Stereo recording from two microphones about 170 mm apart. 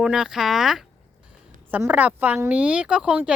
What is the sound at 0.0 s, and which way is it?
A woman's voice, 5° right (ahead or behind).